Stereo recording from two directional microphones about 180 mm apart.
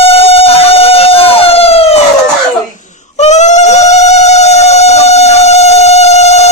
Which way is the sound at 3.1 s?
40° left (ahead or behind).